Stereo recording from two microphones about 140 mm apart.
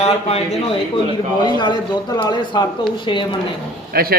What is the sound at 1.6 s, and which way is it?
Speech, 30° left (ahead or behind).